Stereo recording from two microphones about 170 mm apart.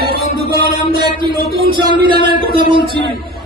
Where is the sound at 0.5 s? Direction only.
65° left (ahead or behind).